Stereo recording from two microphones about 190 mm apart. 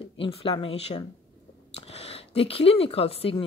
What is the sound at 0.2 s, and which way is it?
Speech, 30° left (ahead or behind).